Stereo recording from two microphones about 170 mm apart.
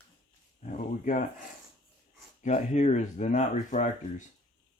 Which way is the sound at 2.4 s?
45° left (ahead or behind).